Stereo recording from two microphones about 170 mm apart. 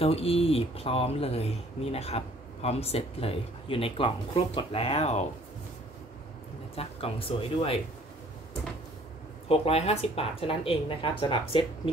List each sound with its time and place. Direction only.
0.0 s speech: 35° left (ahead or behind)
6.7 s speech: 35° left (ahead or behind)
9.5 s speech: 35° left (ahead or behind)